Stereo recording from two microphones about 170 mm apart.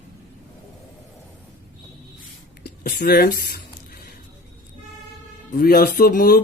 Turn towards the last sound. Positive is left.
turn(degrees=60)  # may be behind; listen again after turning